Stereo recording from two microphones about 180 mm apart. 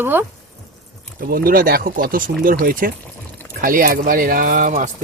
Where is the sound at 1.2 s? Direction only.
55° right (ahead or behind).